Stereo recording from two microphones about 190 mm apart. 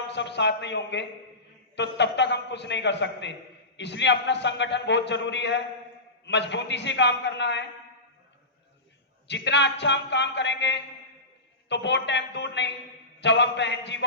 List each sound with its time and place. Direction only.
0.1 s a man's voice: 65° left (ahead or behind)
9.2 s a man's voice: 65° left (ahead or behind)